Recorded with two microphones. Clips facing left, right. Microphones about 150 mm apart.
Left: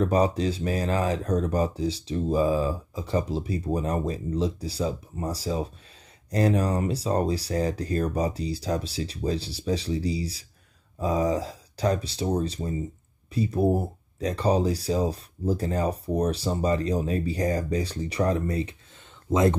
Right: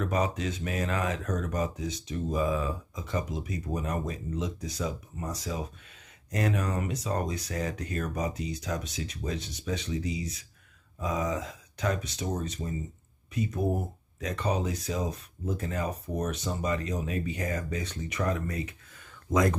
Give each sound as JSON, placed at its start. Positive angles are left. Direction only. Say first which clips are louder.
{"t": 0.0, "sound": "speech", "louder": "left 7 dB", "side_deg": 35}